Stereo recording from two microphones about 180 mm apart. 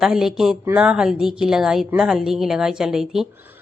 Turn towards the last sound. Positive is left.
turn(degrees=0)  # may be behind; listen again after turning